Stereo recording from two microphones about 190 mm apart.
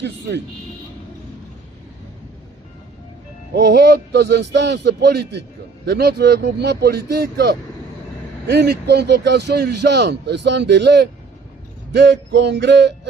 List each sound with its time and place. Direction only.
0.0 s speech: 65° right (ahead or behind)
3.5 s speech: 65° right (ahead or behind)